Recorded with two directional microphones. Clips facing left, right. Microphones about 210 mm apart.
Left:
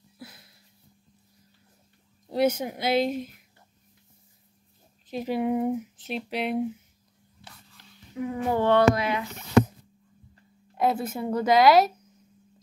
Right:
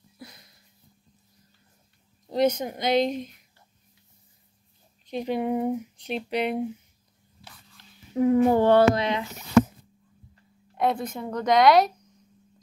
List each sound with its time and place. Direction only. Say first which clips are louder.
0.2 s a sound: even; 5° left (ahead or behind)
2.3 s speech: right 1 dB; 5° left (ahead or behind)
5.0 s speech: even; 5° left (ahead or behind)
8.1 s a child's voice: right 8 dB; 45° right (ahead or behind); by 9.2 s 30° right (ahead or behind)
10.7 s speech: even; 5° left (ahead or behind)